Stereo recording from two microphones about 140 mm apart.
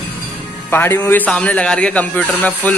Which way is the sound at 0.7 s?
15° left (ahead or behind).